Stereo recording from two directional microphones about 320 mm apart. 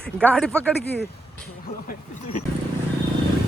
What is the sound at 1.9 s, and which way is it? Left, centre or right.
Speech, left.